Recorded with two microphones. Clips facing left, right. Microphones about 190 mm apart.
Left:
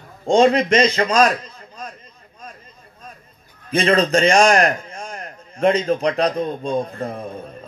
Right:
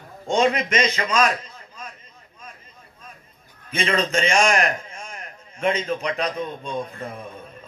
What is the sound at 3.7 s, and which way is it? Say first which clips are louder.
A man's voice: left 6 dB; 35° left (ahead or behind).